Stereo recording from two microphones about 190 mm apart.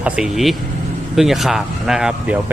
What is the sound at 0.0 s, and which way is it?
Speech, 5° right (ahead or behind).